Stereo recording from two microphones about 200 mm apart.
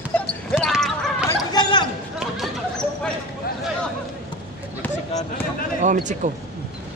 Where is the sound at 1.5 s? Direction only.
25° left (ahead or behind).